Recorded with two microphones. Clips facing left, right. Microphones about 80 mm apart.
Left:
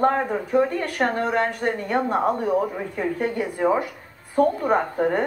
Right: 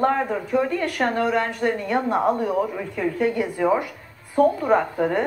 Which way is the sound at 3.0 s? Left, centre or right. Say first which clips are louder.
Right 2 dB; left.